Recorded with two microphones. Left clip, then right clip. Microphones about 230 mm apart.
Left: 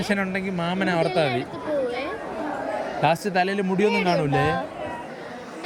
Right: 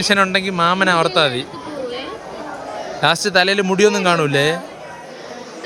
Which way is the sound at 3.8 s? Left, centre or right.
Right.